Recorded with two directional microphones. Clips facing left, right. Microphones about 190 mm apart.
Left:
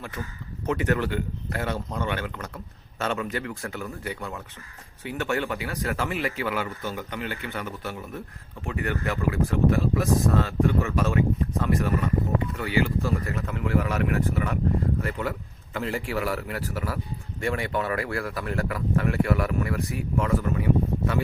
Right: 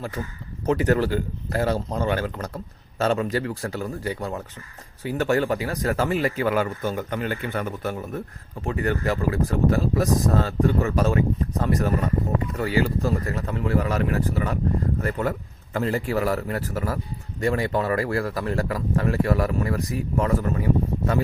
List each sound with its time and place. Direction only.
0.2 s speech: 30° right (ahead or behind); by 8.2 s 45° right (ahead or behind)
8.6 s speech: 35° right (ahead or behind)